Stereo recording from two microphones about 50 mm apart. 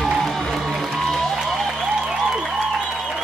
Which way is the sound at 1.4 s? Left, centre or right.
Centre.